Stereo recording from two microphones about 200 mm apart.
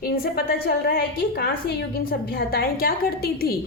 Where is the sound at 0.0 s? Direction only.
50° left (ahead or behind).